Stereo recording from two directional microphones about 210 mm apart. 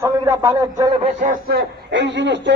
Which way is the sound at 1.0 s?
40° right (ahead or behind).